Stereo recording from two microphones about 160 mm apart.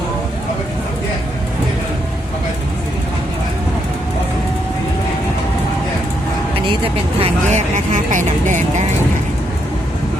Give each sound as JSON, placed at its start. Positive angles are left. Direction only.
{"t": 6.8, "sound": "speech", "side_deg": -35}
{"t": 7.9, "sound": "speech", "side_deg": -50}